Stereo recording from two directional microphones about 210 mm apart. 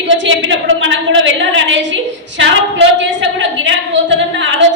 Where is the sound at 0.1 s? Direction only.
60° right (ahead or behind).